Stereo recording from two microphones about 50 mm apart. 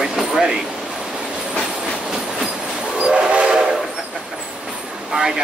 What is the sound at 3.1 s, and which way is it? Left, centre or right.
Train, right.